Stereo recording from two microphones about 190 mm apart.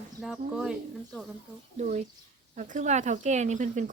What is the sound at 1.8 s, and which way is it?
Speech, 40° right (ahead or behind).